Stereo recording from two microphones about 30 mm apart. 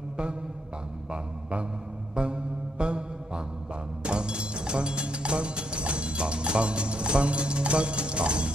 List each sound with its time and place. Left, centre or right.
1.1 s a sound: right
2.1 s mantra: right
4.0 s music: right